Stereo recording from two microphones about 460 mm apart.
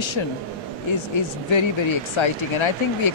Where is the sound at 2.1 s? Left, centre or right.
Left.